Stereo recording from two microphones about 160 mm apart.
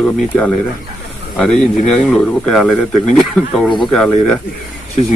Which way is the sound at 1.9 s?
5° left (ahead or behind).